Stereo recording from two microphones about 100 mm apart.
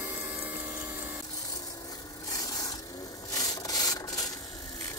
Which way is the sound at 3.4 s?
40° left (ahead or behind).